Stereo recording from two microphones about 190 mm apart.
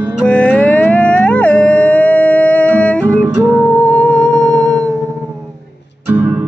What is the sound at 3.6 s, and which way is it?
Music, 5° left (ahead or behind).